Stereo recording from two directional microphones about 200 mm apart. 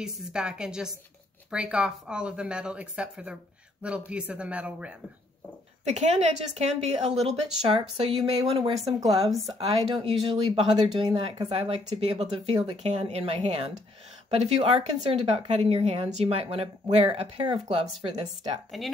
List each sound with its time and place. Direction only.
0.0 s speech: 5° right (ahead or behind)
5.9 s a woman's voice: 35° right (ahead or behind); by 9.3 s 20° right (ahead or behind)
9.3 s speech: centre (ahead or behind)
10.0 s speech: 30° right (ahead or behind)
11.5 s a woman's voice: 30° right (ahead or behind)